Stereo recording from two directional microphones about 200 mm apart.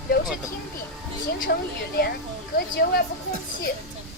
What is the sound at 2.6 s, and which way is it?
Speech, 50° left (ahead or behind).